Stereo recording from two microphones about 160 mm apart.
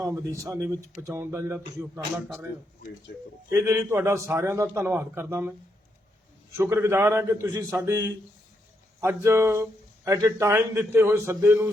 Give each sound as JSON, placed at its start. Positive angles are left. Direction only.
{"t": 0.0, "sound": "a man's voice", "side_deg": -20}
{"t": 3.5, "sound": "a man's voice", "side_deg": -20}
{"t": 6.6, "sound": "a man's voice", "side_deg": -15}